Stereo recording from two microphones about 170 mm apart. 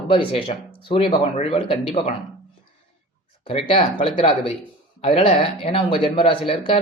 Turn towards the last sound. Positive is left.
turn(degrees=35)  # may be behind; listen again after turning